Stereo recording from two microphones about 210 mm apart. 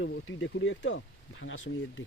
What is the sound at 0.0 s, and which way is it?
Speech, 65° left (ahead or behind).